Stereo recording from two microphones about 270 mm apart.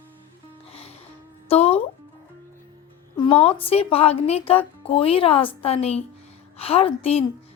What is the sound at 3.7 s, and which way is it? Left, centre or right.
Music, left.